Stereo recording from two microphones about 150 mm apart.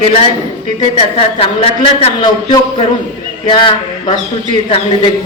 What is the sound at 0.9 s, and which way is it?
A woman's voice, 40° left (ahead or behind).